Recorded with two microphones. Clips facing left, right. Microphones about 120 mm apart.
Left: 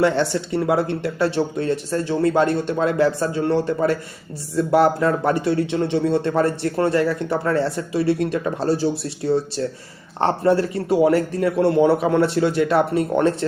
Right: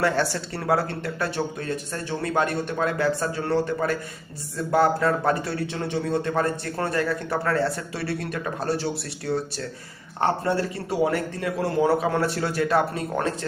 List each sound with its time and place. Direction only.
0.0 s speech: 20° left (ahead or behind)
10.2 s speech: 25° left (ahead or behind)